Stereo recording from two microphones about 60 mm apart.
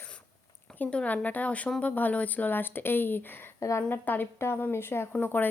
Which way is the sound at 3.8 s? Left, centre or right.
Left.